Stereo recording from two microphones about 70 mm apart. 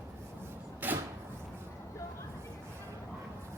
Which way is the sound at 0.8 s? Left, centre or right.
Right.